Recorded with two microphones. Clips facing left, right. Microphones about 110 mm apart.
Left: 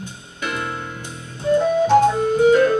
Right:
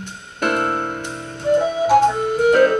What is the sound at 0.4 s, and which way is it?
Music, 55° right (ahead or behind).